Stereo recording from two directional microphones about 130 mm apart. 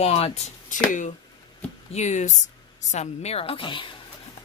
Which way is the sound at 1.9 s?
65° left (ahead or behind).